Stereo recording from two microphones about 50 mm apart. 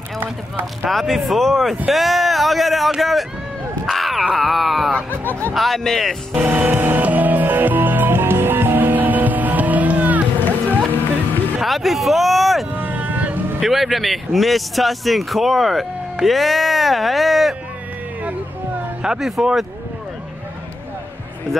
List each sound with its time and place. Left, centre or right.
0.8 s speech: centre
5.1 s speech: left
5.5 s speech: centre
6.4 s music: right
6.7 s music: right
11.6 s a sound: centre
12.7 s vehicle: right
13.6 s speech: centre
19.0 s speech: centre